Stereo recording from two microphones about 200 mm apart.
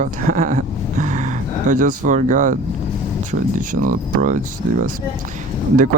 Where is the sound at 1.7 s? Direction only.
40° right (ahead or behind).